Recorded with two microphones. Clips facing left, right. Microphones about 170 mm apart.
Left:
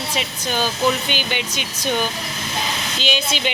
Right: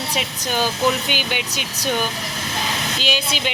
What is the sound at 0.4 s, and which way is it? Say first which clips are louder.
Speech: even; 10° right (ahead or behind).